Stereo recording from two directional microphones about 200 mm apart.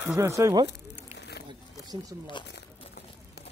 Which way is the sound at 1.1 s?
55° left (ahead or behind).